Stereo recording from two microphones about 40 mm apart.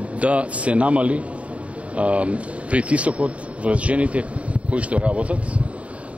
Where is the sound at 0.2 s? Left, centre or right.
Right.